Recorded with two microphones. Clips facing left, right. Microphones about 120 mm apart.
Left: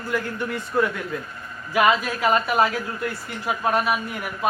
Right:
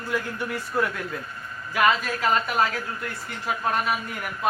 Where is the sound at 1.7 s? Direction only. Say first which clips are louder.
Left 3 dB; 10° left (ahead or behind).